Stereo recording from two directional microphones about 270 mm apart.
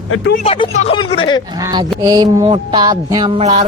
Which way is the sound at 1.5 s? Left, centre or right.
Centre.